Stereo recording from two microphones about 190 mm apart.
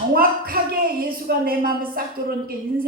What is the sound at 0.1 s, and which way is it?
Speech, 50° right (ahead or behind).